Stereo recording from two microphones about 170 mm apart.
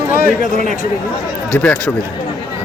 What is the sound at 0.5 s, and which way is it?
Speech, 45° right (ahead or behind).